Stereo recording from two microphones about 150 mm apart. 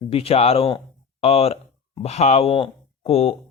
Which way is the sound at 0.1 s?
40° left (ahead or behind).